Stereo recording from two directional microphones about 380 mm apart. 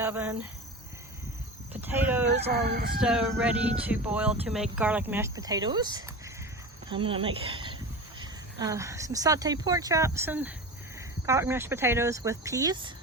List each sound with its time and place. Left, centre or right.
0.0 s cricket: centre
1.7 s speech: centre
2.4 s speech: right
2.9 s speech: centre